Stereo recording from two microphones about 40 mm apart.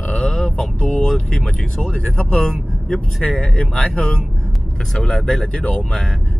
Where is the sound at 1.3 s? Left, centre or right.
Centre.